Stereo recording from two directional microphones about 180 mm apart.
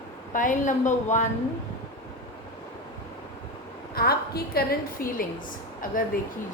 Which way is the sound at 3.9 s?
60° left (ahead or behind).